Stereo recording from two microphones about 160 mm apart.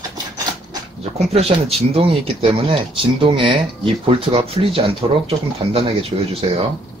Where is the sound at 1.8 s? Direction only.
35° right (ahead or behind).